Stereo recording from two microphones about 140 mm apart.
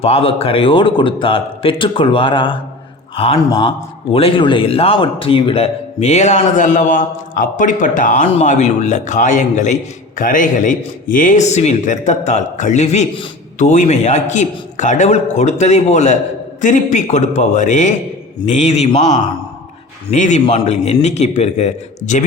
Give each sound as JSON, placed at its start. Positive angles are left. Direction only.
{"t": 0.0, "sound": "a man's voice", "side_deg": 45}
{"t": 10.2, "sound": "speech", "side_deg": 75}
{"t": 20.1, "sound": "speech", "side_deg": 60}